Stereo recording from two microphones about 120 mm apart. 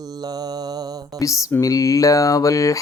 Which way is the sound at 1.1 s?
25° left (ahead or behind).